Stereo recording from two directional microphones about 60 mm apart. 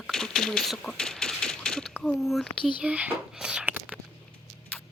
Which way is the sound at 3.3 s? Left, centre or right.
Centre.